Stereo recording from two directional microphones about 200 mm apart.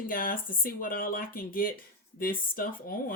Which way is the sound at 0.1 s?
45° left (ahead or behind).